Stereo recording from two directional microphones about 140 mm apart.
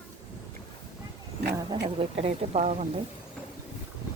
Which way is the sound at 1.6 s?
40° right (ahead or behind).